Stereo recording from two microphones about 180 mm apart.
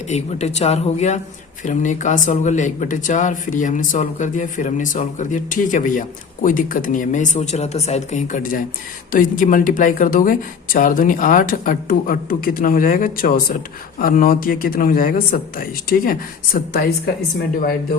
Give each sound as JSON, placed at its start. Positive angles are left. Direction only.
{"t": 0.1, "sound": "speech", "side_deg": 35}